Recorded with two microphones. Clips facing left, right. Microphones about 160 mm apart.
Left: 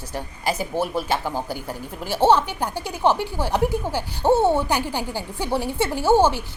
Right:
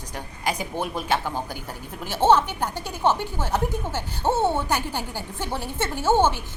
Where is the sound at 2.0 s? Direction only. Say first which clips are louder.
Left 1 dB; 10° left (ahead or behind).